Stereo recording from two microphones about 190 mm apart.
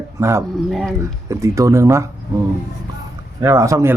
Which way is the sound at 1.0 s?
15° right (ahead or behind).